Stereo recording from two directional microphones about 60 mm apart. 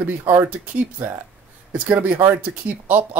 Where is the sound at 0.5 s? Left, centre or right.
Right.